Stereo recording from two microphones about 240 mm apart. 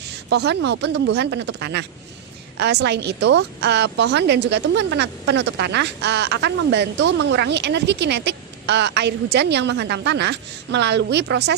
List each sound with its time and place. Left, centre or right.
0.3 s a woman's voice: right